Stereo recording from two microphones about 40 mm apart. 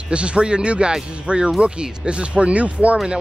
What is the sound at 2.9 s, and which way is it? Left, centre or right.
Speech, right.